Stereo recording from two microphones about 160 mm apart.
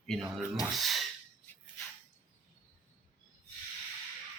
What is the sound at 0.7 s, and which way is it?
Speech, centre (ahead or behind).